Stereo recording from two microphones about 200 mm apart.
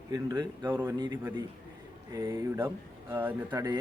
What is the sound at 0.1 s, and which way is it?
Speech, 15° right (ahead or behind).